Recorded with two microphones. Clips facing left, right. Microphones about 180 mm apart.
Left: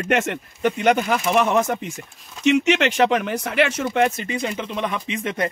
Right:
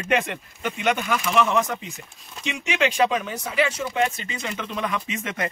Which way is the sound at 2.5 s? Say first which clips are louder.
Left 7 dB; 65° left (ahead or behind).